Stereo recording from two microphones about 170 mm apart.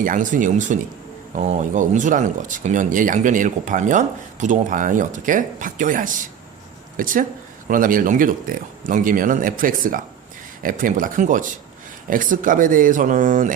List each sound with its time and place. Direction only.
0.0 s speech: 50° right (ahead or behind)